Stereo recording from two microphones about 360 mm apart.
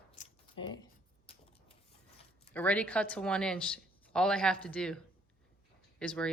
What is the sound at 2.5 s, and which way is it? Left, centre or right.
Speech, centre.